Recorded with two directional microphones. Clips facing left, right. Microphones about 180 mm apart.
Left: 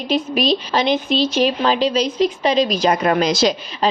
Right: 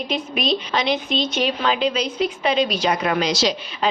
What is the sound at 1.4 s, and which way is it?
A woman's voice, 35° left (ahead or behind).